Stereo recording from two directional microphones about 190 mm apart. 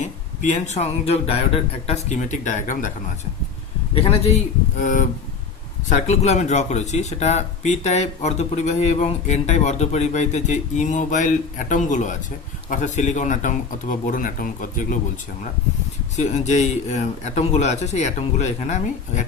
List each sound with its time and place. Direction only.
0.0 s speech: 40° left (ahead or behind)
3.9 s speech: 30° left (ahead or behind)
4.8 s speech: 40° left (ahead or behind)
16.1 s speech: 35° left (ahead or behind)